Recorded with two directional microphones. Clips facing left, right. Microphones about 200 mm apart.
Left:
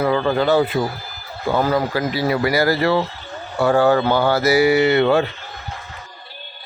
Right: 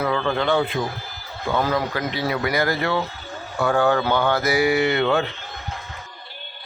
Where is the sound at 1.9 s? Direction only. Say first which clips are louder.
Left 5 dB; 5° left (ahead or behind).